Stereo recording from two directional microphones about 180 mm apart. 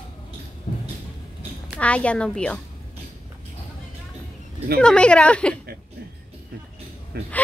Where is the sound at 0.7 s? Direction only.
45° left (ahead or behind).